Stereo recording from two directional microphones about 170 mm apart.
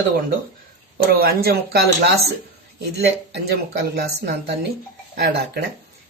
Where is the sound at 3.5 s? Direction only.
75° right (ahead or behind).